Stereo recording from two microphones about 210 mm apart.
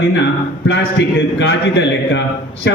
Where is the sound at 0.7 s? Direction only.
60° left (ahead or behind).